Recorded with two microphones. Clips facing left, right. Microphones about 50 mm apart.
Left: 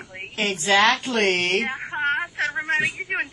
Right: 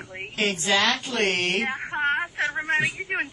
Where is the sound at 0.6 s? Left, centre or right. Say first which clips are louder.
Left 7 dB; left.